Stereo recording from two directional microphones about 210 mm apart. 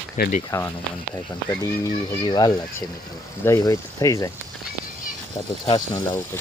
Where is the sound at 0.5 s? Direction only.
10° left (ahead or behind).